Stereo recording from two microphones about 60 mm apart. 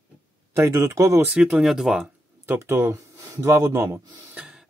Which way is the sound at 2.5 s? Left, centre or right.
Right.